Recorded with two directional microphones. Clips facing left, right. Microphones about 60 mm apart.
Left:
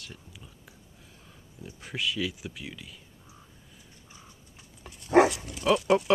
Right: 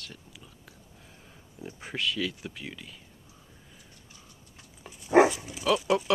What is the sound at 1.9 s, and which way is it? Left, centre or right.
Speech, centre.